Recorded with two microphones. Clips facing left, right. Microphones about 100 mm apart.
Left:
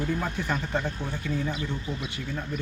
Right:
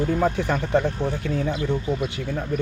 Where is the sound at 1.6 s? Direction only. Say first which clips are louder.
Right 9 dB; 50° right (ahead or behind).